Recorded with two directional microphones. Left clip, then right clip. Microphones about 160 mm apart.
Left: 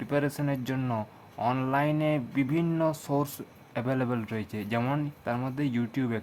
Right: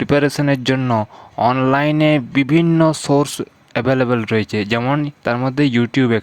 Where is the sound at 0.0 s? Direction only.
55° right (ahead or behind).